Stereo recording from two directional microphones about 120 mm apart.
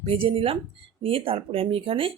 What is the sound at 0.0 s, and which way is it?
Speech, 50° right (ahead or behind).